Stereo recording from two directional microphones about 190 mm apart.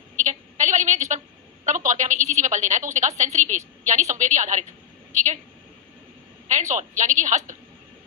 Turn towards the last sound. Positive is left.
turn(degrees=-40)  # may be behind; listen again after turning